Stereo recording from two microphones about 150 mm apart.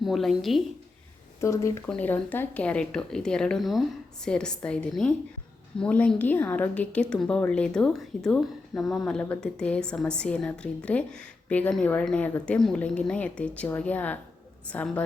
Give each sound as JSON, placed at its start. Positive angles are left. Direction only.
{"t": 0.0, "sound": "speech", "side_deg": 0}
{"t": 1.4, "sound": "a woman's voice", "side_deg": 20}